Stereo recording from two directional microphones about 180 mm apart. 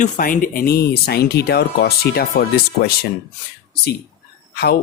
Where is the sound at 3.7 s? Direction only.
65° left (ahead or behind).